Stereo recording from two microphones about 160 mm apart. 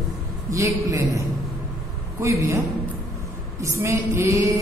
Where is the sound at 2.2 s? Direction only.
15° right (ahead or behind).